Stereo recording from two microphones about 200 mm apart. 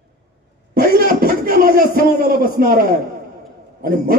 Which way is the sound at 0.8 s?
45° right (ahead or behind).